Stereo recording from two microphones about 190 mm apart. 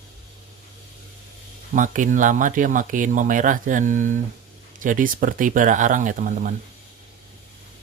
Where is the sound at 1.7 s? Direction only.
45° right (ahead or behind).